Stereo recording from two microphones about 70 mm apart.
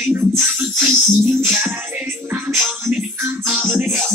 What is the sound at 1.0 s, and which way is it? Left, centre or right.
Music, right.